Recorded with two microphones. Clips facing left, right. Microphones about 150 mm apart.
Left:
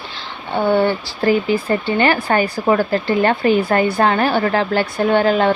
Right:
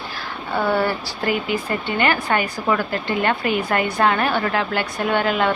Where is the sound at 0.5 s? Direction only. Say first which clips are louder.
Left 5 dB; 25° left (ahead or behind).